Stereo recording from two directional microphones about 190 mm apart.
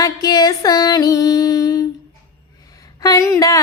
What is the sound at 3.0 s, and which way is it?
Speech, 15° left (ahead or behind).